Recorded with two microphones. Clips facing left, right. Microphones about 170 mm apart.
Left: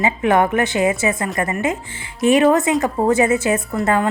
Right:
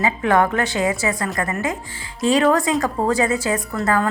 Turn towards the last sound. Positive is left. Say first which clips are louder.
# left 2 dB
turn(degrees=20)  # may be behind; listen again after turning